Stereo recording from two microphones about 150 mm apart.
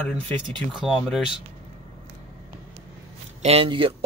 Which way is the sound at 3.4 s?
40° right (ahead or behind).